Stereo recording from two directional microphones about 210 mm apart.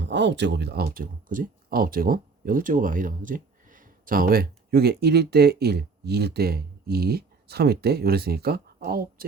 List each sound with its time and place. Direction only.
0.0 s speech: 55° right (ahead or behind)